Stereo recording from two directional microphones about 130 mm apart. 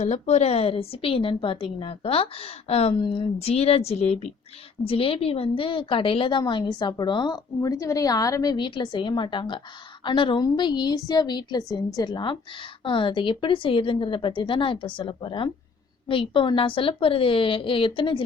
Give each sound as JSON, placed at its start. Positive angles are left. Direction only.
{"t": 0.0, "sound": "a woman's voice", "side_deg": 55}
{"t": 4.8, "sound": "a woman's voice", "side_deg": 45}